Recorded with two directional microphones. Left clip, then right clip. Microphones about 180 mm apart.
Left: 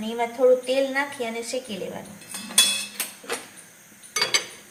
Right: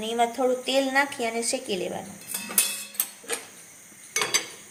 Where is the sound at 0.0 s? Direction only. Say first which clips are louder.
Left 3 dB; 65° right (ahead or behind).